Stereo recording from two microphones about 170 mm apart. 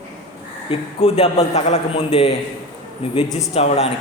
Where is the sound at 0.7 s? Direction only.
35° left (ahead or behind).